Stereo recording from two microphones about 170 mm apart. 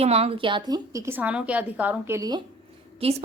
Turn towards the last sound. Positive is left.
turn(degrees=-35)  # may be behind; listen again after turning